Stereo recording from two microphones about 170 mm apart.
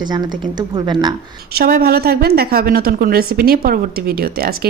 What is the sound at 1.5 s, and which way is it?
A woman's voice, 60° right (ahead or behind).